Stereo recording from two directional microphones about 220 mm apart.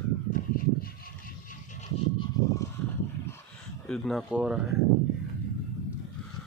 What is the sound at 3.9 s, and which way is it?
Speech, centre (ahead or behind).